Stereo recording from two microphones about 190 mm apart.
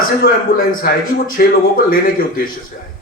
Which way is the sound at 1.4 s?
50° left (ahead or behind).